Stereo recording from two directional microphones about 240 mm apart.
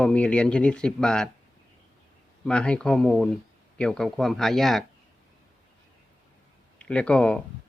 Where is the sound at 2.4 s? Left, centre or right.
Centre.